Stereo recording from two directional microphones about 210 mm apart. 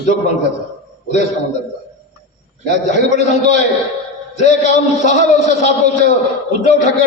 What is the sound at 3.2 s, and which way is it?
A man's voice, 35° left (ahead or behind).